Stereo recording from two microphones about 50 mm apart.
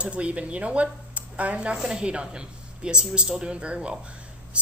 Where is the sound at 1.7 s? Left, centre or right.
Centre.